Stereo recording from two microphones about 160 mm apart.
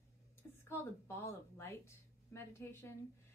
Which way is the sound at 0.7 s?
15° left (ahead or behind).